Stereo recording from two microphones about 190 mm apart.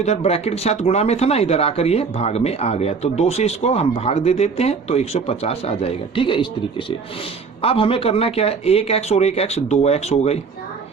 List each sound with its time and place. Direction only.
0.0 s speech: 35° left (ahead or behind)